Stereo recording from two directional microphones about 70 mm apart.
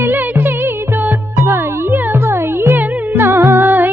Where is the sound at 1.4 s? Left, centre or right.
Right.